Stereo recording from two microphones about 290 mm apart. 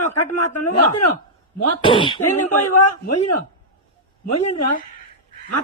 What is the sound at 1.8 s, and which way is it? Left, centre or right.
Speech, centre.